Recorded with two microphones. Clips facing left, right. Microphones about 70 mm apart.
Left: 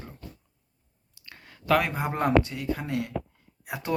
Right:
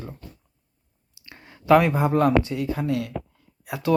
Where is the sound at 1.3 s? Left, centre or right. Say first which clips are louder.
Right 7 dB; centre.